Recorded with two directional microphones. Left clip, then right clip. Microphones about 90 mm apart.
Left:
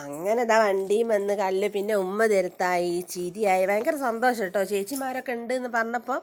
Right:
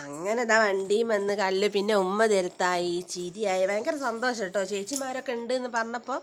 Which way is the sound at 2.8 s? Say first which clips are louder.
Left 2 dB; 40° left (ahead or behind).